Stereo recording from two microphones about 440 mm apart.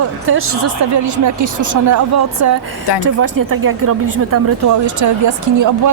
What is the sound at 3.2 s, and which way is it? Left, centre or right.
Speech, right.